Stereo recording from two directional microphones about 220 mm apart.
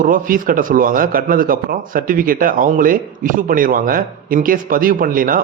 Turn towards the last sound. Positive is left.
turn(degrees=-40)  # may be behind; listen again after turning